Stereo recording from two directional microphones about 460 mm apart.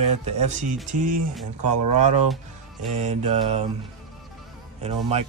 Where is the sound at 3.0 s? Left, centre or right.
Centre.